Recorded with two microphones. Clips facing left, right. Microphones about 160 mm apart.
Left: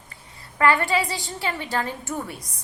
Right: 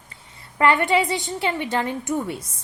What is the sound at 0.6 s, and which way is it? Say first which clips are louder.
A woman's voice: right 2 dB; 20° right (ahead or behind).